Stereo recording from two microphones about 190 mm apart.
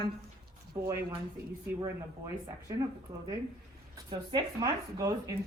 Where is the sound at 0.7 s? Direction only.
20° right (ahead or behind).